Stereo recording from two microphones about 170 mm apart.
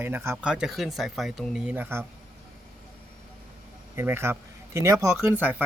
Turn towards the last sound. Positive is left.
turn(degrees=-10)  # may be behind; listen again after turning